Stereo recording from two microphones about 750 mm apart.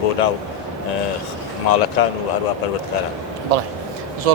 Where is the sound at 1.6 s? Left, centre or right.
Left.